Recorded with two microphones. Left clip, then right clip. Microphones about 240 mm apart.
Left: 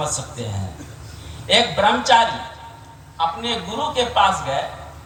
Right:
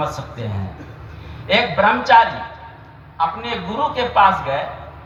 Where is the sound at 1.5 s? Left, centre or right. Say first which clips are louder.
Right 1 dB; left.